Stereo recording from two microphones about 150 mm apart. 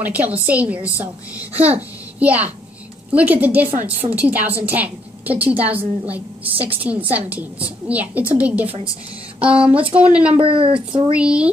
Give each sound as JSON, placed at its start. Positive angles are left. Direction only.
{"t": 0.0, "sound": "a woman's voice", "side_deg": -10}
{"t": 10.3, "sound": "speech", "side_deg": -35}
{"t": 11.1, "sound": "a woman's voice", "side_deg": -5}